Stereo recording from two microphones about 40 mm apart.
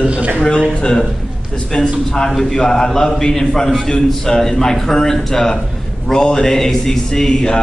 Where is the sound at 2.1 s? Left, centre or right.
Centre.